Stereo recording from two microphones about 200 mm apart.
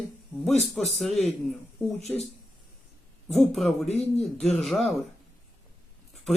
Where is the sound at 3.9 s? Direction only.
30° left (ahead or behind).